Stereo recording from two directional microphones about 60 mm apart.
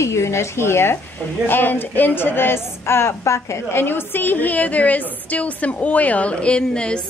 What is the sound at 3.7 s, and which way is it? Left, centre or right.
A woman's voice, left.